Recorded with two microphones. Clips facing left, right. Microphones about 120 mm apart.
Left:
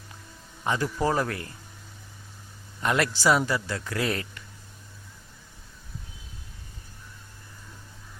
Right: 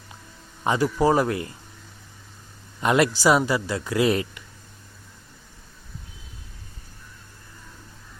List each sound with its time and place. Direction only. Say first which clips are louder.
0.6 s speech: right 5 dB; 15° right (ahead or behind)
2.8 s speech: right 4 dB; 20° right (ahead or behind)